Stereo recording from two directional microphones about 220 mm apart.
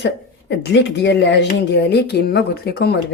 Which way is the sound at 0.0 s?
50° left (ahead or behind).